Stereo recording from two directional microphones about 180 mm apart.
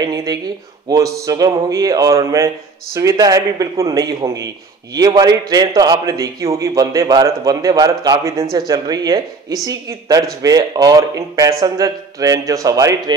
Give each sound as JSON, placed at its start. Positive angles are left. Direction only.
{"t": 0.0, "sound": "a man's voice", "side_deg": -20}